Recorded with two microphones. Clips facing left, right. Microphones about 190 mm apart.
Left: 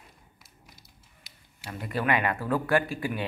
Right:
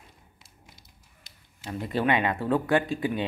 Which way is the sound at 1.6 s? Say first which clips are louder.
Right 3 dB; 25° right (ahead or behind).